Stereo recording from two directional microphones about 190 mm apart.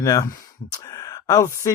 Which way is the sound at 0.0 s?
20° left (ahead or behind).